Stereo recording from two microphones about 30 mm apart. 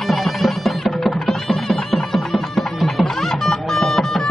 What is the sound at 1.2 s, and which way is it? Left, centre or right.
Music, centre.